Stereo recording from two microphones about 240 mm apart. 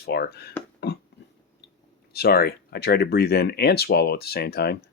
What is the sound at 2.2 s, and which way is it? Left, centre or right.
Speech, left.